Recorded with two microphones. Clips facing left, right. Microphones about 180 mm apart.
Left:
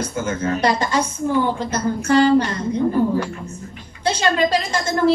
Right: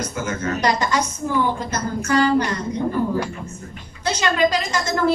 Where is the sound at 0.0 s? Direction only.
30° left (ahead or behind).